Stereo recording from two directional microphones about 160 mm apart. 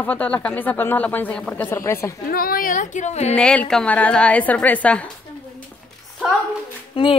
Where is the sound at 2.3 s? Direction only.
65° left (ahead or behind); by 3.3 s 45° left (ahead or behind).